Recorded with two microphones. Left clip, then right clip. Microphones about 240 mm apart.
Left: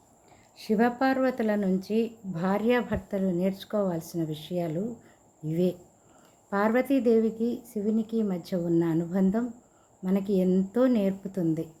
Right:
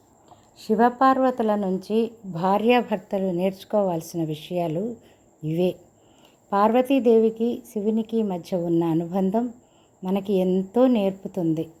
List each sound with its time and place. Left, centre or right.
0.5 s a woman's voice: centre